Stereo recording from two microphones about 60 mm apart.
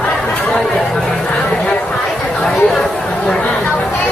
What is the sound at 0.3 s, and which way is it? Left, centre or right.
Chatter, centre.